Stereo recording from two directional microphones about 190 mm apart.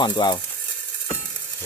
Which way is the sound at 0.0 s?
25° left (ahead or behind).